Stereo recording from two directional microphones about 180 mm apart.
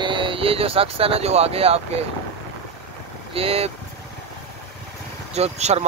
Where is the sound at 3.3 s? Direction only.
35° right (ahead or behind).